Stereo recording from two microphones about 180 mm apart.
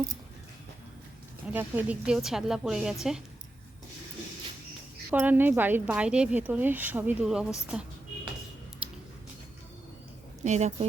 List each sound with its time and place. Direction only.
1.5 s a woman's voice: 10° right (ahead or behind)
5.1 s a woman's voice: 10° right (ahead or behind)
7.7 s a sound: 5° right (ahead or behind)
10.4 s a woman's voice: 40° right (ahead or behind)